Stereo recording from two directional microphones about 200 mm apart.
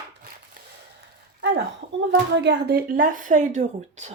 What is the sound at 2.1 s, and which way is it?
Speech, 60° right (ahead or behind).